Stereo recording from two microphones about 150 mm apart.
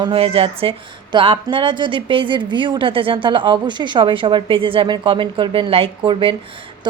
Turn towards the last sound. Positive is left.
turn(degrees=-35)  # may be behind; listen again after turning